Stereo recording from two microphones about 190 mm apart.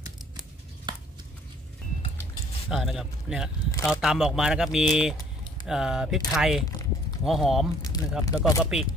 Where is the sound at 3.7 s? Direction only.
15° left (ahead or behind).